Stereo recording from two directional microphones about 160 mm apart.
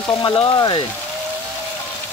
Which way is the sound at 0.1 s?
25° left (ahead or behind).